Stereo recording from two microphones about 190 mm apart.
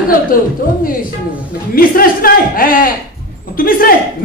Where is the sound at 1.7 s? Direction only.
50° left (ahead or behind).